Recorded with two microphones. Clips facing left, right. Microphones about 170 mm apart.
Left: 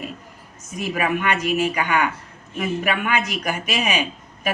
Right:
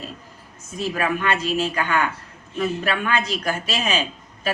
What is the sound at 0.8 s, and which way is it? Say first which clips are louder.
Speech: left 1 dB; 15° left (ahead or behind).